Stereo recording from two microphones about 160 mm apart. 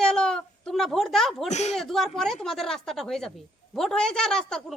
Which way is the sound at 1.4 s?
45° left (ahead or behind).